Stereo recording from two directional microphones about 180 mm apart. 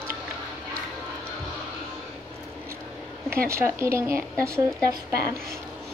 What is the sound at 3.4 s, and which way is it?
Speech, 15° right (ahead or behind).